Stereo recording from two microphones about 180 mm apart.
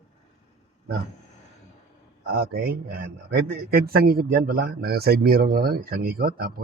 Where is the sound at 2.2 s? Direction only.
60° right (ahead or behind).